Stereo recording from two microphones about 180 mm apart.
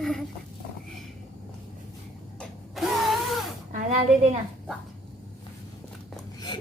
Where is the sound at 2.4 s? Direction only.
Centre (ahead or behind).